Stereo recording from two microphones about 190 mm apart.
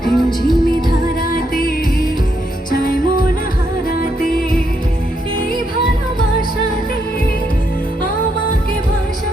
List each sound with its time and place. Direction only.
0.0 s music: centre (ahead or behind)
1.3 s music: 50° left (ahead or behind)